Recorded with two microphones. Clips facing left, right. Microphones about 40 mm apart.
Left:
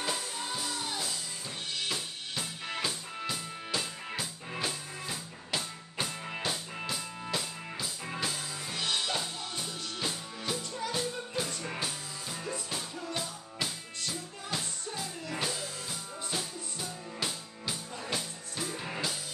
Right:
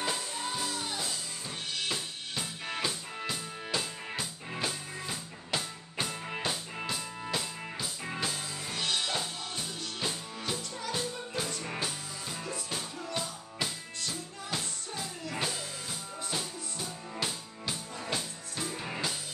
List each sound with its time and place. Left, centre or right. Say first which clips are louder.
0.0 s music: right 1 dB; centre
15.3 s music: even; centre